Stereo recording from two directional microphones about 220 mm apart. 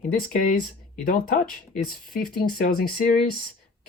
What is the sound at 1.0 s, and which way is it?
Speech, 40° left (ahead or behind).